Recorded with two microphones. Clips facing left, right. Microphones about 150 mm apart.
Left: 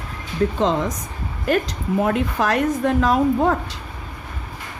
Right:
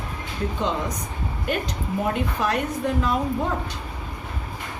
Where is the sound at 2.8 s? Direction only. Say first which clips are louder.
Left 6 dB; 90° left.